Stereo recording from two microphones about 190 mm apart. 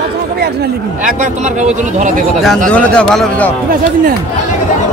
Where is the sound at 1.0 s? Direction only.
40° right (ahead or behind).